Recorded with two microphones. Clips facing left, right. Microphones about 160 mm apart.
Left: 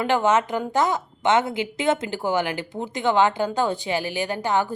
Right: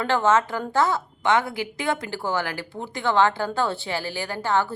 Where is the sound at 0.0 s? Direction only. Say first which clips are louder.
Left 1 dB; 15° left (ahead or behind).